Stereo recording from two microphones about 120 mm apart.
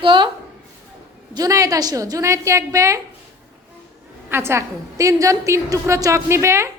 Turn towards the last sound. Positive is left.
turn(degrees=-20)  # may be behind; listen again after turning